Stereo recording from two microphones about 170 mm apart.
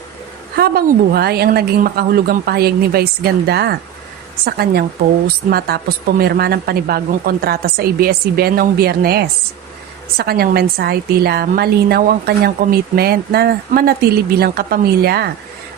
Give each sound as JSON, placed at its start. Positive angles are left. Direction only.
{"t": 0.5, "sound": "a woman's voice", "side_deg": -65}